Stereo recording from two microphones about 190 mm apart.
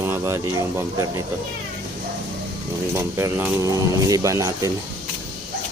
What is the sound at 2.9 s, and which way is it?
Speech, 15° right (ahead or behind).